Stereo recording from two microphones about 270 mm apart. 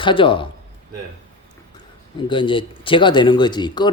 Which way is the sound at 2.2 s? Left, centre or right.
Centre.